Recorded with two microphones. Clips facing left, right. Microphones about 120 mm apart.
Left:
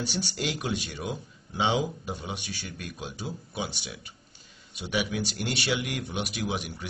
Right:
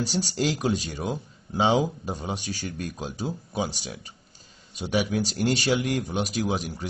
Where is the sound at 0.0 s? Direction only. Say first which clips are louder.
Right 5 dB; 40° right (ahead or behind).